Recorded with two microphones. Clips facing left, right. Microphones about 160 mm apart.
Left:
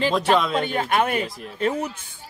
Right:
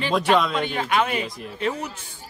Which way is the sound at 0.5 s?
45° left (ahead or behind).